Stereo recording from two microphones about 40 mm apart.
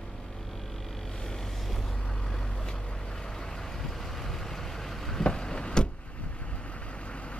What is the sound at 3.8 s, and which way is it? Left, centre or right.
Vehicle, centre.